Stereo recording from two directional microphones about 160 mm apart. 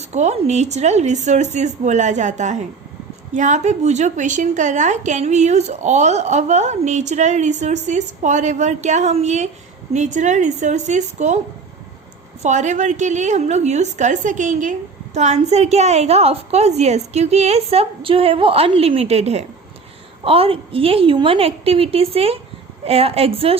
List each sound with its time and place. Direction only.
0.1 s a woman's voice: 45° right (ahead or behind)
12.4 s a woman's voice: 50° right (ahead or behind)